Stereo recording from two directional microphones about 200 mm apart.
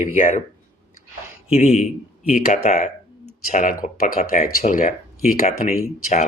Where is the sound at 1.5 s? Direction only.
35° left (ahead or behind).